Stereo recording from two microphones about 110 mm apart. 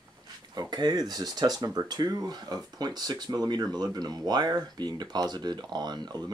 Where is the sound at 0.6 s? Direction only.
40° right (ahead or behind).